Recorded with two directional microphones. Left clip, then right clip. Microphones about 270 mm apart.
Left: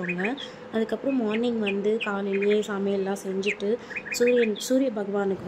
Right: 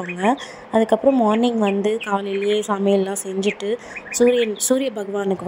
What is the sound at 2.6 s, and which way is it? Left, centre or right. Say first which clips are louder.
A woman's voice: right 8 dB; right.